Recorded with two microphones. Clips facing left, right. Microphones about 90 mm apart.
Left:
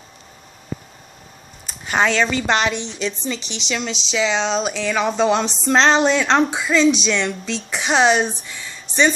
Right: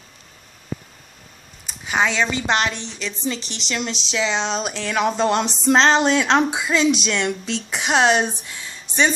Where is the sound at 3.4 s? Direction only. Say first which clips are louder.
Left 3 dB; 45° right (ahead or behind).